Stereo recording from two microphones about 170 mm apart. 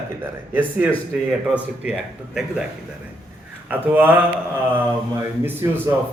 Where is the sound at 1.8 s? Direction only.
5° right (ahead or behind).